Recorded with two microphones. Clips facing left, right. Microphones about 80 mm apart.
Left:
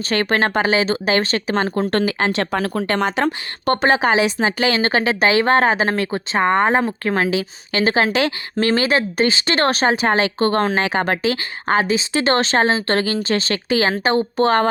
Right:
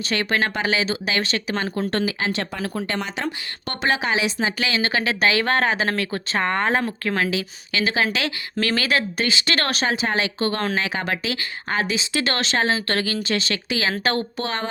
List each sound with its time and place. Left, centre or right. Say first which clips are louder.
0.1 s speech: left 5 dB; left
1.9 s speech: left 5 dB; left
14.0 s speech: left 5 dB; left
14.3 s speech: left 11 dB; left